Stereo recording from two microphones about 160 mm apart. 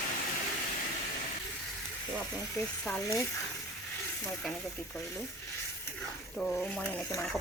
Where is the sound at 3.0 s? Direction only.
20° left (ahead or behind).